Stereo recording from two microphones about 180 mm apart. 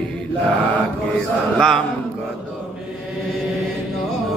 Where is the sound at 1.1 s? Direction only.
5° left (ahead or behind).